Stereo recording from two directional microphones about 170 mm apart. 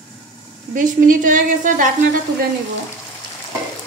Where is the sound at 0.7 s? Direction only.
50° right (ahead or behind).